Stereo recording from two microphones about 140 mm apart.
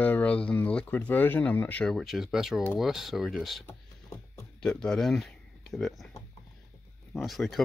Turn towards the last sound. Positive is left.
turn(degrees=0)  # may be behind; listen again after turning